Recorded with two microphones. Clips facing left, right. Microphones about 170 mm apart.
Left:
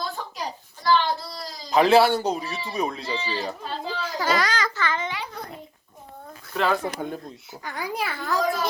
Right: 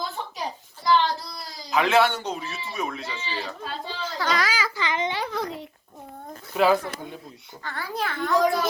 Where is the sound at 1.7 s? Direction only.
35° left (ahead or behind).